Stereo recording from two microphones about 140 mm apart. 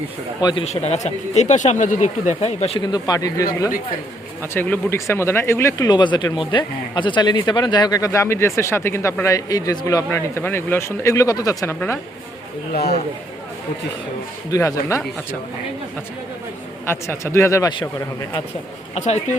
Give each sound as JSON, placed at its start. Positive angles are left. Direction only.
{"t": 0.6, "sound": "speech", "side_deg": 50}
{"t": 2.8, "sound": "speech", "side_deg": 30}
{"t": 4.5, "sound": "speech", "side_deg": 15}
{"t": 14.5, "sound": "speech", "side_deg": 20}
{"t": 16.8, "sound": "speech", "side_deg": 15}
{"t": 18.9, "sound": "speech", "side_deg": 60}